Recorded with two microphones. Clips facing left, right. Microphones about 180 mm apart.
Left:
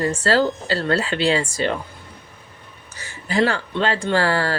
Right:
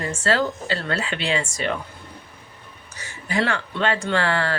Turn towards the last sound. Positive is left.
turn(degrees=35)  # may be behind; listen again after turning